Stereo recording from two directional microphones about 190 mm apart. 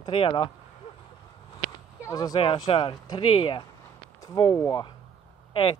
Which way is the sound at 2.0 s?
15° left (ahead or behind).